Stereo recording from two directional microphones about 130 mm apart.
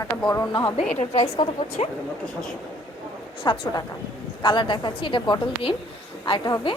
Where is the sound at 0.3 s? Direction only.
30° left (ahead or behind).